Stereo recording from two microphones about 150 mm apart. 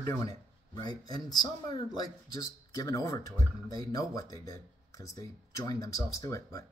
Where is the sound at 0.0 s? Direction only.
20° left (ahead or behind).